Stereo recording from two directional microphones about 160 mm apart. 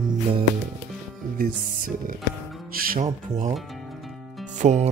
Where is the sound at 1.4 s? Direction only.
60° right (ahead or behind).